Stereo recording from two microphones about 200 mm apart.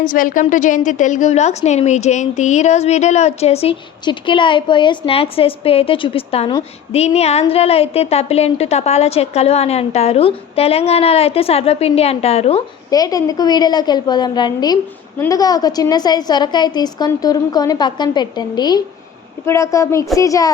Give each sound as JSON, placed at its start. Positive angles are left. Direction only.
{"t": 0.0, "sound": "speech", "side_deg": 45}
{"t": 12.9, "sound": "a woman's voice", "side_deg": 20}